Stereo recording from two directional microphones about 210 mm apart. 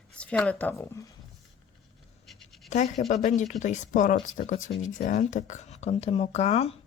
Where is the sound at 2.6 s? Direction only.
35° left (ahead or behind).